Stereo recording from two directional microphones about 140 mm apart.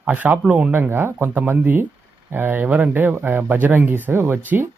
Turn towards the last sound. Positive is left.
turn(degrees=-15)  # may be behind; listen again after turning